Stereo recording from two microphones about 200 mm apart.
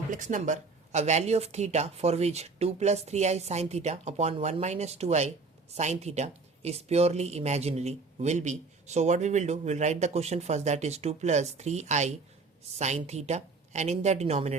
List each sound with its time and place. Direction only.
0.1 s speech: 40° right (ahead or behind)